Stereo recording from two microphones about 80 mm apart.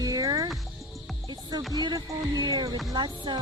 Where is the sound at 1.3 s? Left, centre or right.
Right.